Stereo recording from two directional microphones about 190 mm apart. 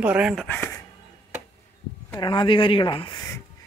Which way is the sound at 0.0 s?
5° right (ahead or behind).